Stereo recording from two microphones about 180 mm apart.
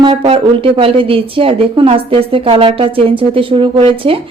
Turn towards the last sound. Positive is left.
turn(degrees=-30)  # may be behind; listen again after turning